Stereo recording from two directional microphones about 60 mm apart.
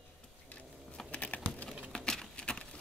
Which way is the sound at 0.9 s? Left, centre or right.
Left.